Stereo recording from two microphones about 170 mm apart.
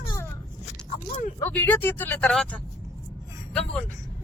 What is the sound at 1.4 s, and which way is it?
Speech, 10° left (ahead or behind).